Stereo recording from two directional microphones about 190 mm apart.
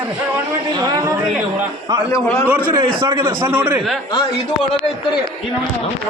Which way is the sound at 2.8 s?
25° right (ahead or behind).